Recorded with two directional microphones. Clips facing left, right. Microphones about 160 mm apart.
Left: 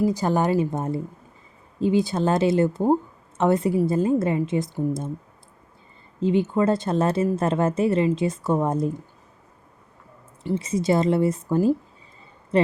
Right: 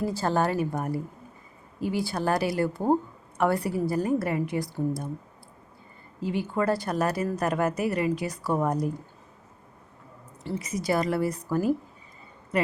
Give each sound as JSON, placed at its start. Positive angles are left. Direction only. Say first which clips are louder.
{"t": 0.0, "sound": "a woman's voice", "louder": "left 4 dB", "side_deg": 15}
{"t": 6.1, "sound": "speech", "louder": "left 7 dB", "side_deg": 20}
{"t": 10.5, "sound": "speech", "louder": "left 5 dB", "side_deg": 25}
{"t": 12.5, "sound": "a sound", "louder": "left 6 dB", "side_deg": 30}